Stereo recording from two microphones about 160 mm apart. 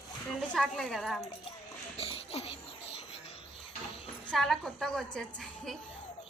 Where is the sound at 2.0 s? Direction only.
40° left (ahead or behind).